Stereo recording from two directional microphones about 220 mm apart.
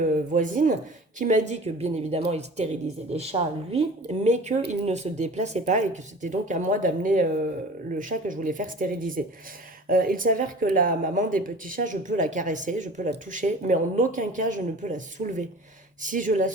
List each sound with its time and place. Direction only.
0.0 s speech: 35° right (ahead or behind)